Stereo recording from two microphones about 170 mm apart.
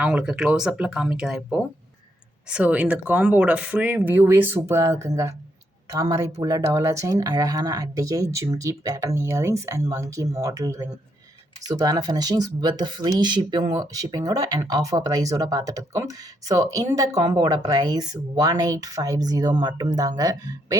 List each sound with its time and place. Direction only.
0.0 s speech: 5° right (ahead or behind)